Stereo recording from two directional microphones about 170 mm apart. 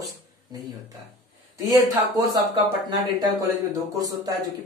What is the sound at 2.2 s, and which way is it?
Speech, 20° right (ahead or behind).